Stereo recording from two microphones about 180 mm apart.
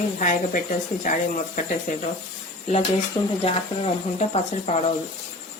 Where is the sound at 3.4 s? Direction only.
35° left (ahead or behind).